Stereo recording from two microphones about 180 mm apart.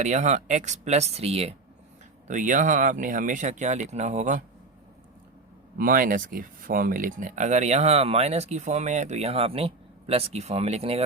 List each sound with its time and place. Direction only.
0.0 s speech: 40° right (ahead or behind)
2.2 s speech: 45° right (ahead or behind)
5.7 s speech: 50° right (ahead or behind); by 11.0 s 35° right (ahead or behind)